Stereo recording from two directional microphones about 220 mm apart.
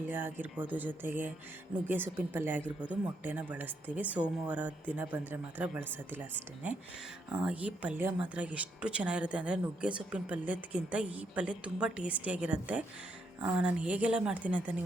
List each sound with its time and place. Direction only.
0.1 s speech: 10° right (ahead or behind)
7.3 s a woman's voice: 5° right (ahead or behind)